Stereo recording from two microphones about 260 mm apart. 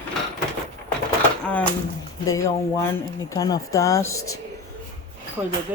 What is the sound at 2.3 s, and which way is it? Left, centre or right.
Speech, centre.